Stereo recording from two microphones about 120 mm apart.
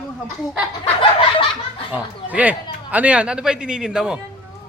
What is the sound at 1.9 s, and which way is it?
Speech, 10° right (ahead or behind).